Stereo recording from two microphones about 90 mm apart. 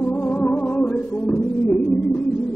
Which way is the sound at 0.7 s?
5° left (ahead or behind).